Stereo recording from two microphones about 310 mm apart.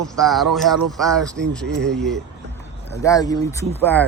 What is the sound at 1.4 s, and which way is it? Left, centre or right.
Speech, right.